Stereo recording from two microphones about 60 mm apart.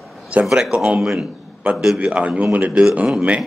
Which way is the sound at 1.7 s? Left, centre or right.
Centre.